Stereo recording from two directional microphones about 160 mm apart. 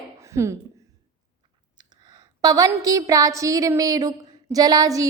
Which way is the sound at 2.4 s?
20° right (ahead or behind).